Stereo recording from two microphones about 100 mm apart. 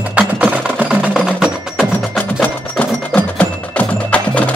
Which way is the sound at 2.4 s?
15° left (ahead or behind).